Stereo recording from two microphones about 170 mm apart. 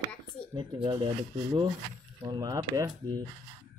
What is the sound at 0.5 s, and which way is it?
Speech, 30° right (ahead or behind).